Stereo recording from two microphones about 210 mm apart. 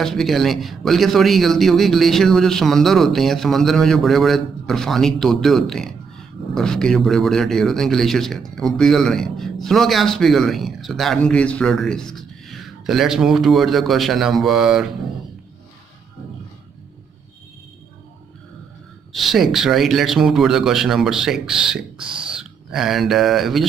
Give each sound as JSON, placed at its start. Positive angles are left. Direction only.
{"t": 0.0, "sound": "speech", "side_deg": 0}
{"t": 19.1, "sound": "speech", "side_deg": 0}
{"t": 22.0, "sound": "speech", "side_deg": -25}
{"t": 22.3, "sound": "speech", "side_deg": -5}